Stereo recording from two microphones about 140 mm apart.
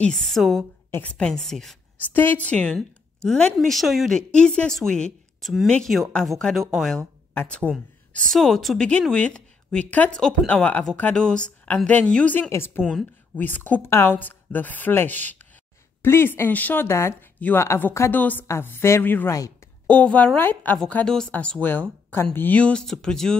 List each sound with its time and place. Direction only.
0.0 s speech: centre (ahead or behind)
2.0 s a woman's voice: 15° left (ahead or behind)